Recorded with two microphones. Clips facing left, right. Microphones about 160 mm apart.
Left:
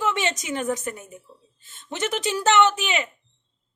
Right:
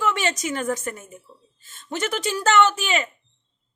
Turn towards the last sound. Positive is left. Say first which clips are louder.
# even
turn(degrees=15)  # may be behind; listen again after turning